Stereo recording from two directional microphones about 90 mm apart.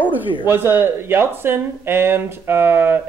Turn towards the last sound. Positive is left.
turn(degrees=-20)  # may be behind; listen again after turning